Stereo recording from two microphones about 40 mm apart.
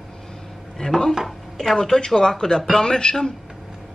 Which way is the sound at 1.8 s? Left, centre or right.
Centre.